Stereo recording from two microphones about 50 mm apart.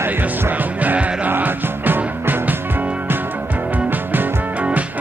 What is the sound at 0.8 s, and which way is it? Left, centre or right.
Music, right.